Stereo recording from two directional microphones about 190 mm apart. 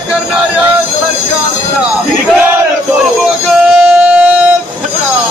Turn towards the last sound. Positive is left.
turn(degrees=-5)  # may be behind; listen again after turning